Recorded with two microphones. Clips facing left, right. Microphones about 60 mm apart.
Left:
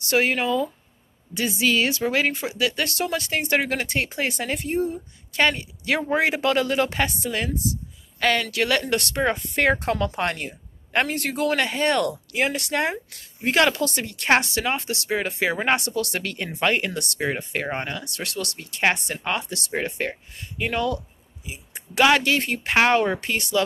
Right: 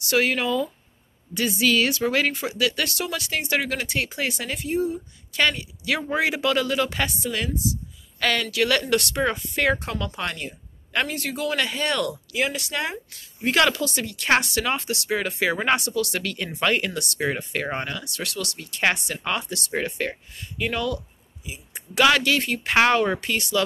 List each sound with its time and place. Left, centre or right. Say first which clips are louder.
0.1 s speech: left 1 dB; left
5.3 s speech: left 1 dB; left
9.6 s a man's voice: left 3 dB; left
11.1 s speech: left 3 dB; left
13.5 s speech: left 1 dB; left
13.7 s speech: left 1 dB; left
14.3 s speech: left 1 dB; left
22.7 s speech: even; centre
23.2 s speech: left 1 dB; left